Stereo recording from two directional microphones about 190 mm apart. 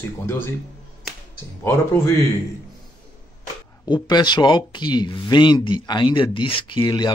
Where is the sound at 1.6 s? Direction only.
10° left (ahead or behind).